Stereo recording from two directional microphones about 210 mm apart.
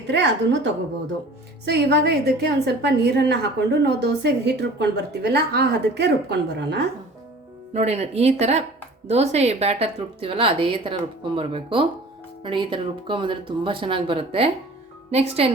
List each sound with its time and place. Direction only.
0.1 s a woman's voice: 55° right (ahead or behind)
7.7 s a woman's voice: 30° right (ahead or behind)